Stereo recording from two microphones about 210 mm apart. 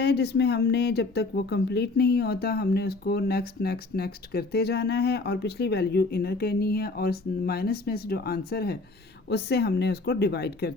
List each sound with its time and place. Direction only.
0.0 s speech: 55° left (ahead or behind)